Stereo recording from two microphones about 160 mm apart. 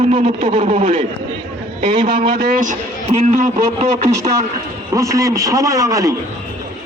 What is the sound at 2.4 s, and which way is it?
Speech, 55° right (ahead or behind).